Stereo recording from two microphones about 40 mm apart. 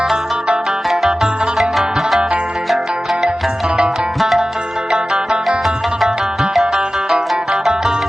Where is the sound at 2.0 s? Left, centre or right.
Centre.